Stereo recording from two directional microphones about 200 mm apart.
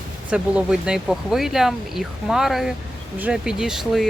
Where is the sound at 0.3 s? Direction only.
5° right (ahead or behind).